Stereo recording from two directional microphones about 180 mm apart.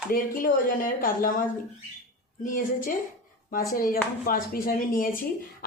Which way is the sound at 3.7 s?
55° left (ahead or behind).